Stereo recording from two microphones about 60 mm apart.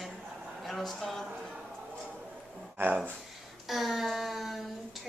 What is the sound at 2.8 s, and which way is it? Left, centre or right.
Speech, right.